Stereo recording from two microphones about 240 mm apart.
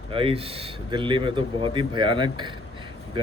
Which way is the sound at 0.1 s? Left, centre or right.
Right.